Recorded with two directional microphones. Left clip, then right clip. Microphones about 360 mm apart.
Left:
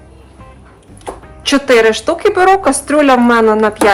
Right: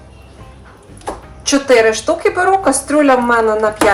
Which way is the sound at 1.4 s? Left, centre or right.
Left.